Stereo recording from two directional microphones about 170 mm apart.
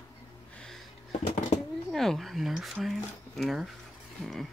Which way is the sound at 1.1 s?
45° left (ahead or behind).